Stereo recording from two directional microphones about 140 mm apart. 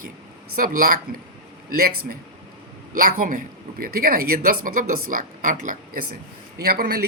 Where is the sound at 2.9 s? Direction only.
85° right.